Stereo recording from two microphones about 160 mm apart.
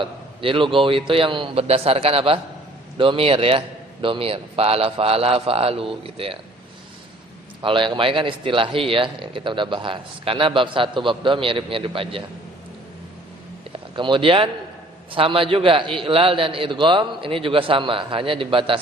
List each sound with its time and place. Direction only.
0.0 s speech: 30° right (ahead or behind)
7.6 s speech: 30° right (ahead or behind)
13.7 s speech: 30° right (ahead or behind)